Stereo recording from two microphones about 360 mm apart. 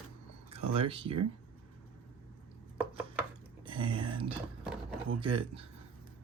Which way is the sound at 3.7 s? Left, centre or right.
Centre.